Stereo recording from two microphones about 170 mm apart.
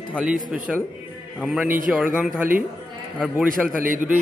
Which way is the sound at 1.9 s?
10° right (ahead or behind).